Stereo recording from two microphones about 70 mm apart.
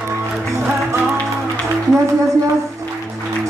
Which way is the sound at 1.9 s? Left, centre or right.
Right.